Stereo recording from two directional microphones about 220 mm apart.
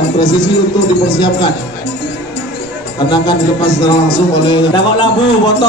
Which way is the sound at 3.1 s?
20° left (ahead or behind).